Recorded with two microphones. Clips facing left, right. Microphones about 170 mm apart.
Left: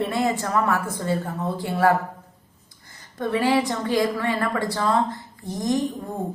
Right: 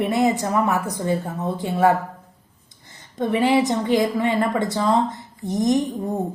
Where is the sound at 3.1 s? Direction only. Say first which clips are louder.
Right 3 dB; 20° right (ahead or behind).